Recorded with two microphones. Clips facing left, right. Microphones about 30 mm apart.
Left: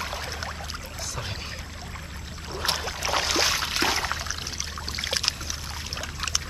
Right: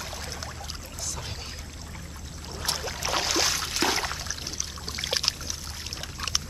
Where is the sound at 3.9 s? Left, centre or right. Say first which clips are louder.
Left 2 dB; centre.